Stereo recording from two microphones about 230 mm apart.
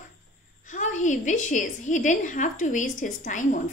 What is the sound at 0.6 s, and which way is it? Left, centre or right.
A woman's voice, left.